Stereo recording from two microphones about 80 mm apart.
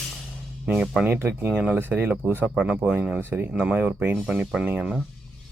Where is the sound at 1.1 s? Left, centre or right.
Right.